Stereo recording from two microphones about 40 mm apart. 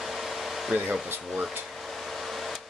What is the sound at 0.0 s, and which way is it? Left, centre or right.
Hair dryer, centre.